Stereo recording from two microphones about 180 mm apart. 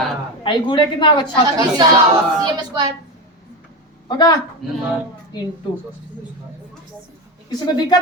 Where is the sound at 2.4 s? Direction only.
20° right (ahead or behind).